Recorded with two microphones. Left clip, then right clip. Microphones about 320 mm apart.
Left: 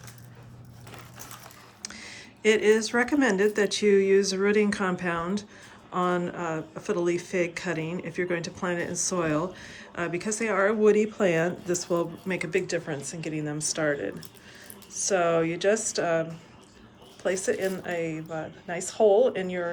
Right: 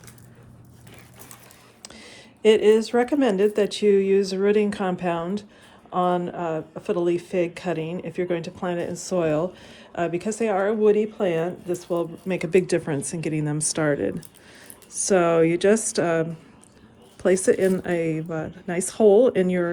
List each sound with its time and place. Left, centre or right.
1.8 s speech: centre
17.2 s speech: centre